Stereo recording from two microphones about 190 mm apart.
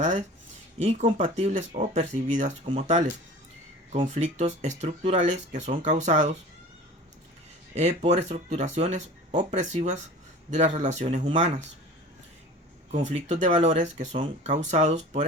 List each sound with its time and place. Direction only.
0.0 s speech: 40° right (ahead or behind)
4.0 s speech: 35° right (ahead or behind)
7.8 s speech: 35° right (ahead or behind)
12.9 s speech: 35° right (ahead or behind)